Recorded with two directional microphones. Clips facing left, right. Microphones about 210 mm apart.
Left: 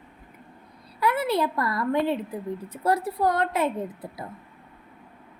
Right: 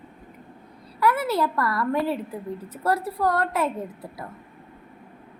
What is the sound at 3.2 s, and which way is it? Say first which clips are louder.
Child singing: even; 20° left (ahead or behind).